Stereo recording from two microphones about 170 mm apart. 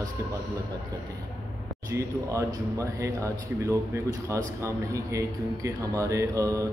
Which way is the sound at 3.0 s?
15° right (ahead or behind).